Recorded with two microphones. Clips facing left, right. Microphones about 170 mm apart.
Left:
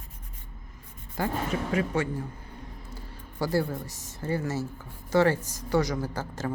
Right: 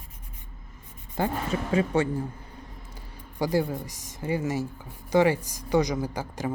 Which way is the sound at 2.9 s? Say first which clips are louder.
Left 2 dB; 15° right (ahead or behind).